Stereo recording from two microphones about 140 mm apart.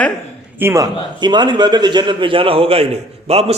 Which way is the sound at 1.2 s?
30° right (ahead or behind).